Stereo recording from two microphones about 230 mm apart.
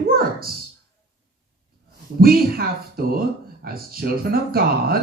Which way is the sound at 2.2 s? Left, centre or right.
Right.